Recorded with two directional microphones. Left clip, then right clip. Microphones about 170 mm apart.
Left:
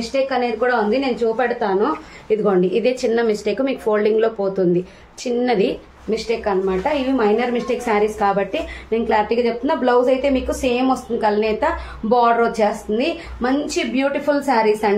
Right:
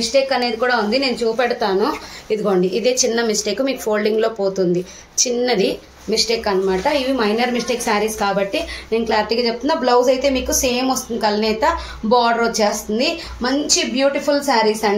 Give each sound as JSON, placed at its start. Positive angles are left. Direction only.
{"t": 0.1, "sound": "a woman's voice", "side_deg": 0}
{"t": 2.4, "sound": "a woman's voice", "side_deg": 35}